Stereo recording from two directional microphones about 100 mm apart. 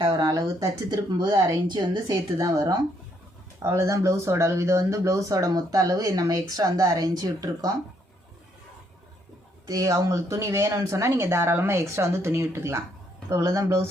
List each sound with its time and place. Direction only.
0.1 s speech: 35° right (ahead or behind)
9.6 s speech: 35° right (ahead or behind)